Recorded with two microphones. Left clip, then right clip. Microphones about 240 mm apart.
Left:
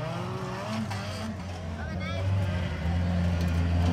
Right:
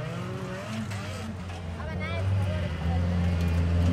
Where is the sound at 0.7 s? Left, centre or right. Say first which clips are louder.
Left 2 dB; centre.